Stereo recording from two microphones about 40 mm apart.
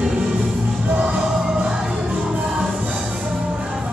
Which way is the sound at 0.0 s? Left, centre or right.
Centre.